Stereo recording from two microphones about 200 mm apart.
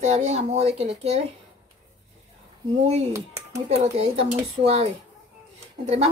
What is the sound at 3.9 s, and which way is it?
Speech, 30° right (ahead or behind).